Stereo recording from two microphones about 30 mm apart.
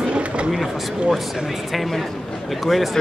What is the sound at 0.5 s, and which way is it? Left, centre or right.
Speech, centre.